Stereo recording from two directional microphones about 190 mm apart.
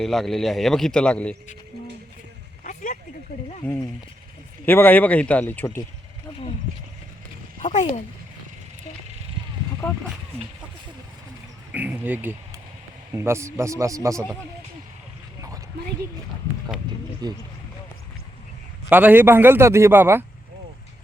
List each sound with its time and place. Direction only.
0.0 s a man's voice: centre (ahead or behind)
2.6 s a sound: 45° left (ahead or behind)
4.6 s speech: 10° left (ahead or behind)
7.6 s speech: 40° left (ahead or behind)
9.8 s a man's voice: 5° left (ahead or behind)
11.7 s a man's voice: 10° right (ahead or behind)
15.4 s a sound: 15° right (ahead or behind)
18.9 s a man's voice: 10° right (ahead or behind)